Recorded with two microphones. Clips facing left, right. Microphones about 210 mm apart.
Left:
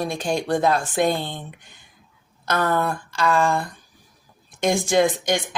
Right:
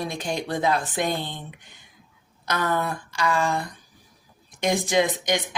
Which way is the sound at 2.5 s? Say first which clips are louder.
Left 3 dB; 50° left (ahead or behind).